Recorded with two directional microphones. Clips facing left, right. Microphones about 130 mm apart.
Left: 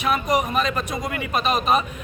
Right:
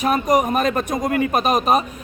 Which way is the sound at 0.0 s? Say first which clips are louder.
Right 4 dB; 45° right (ahead or behind).